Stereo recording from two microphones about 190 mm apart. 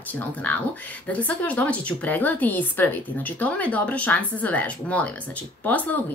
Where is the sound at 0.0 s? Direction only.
10° left (ahead or behind).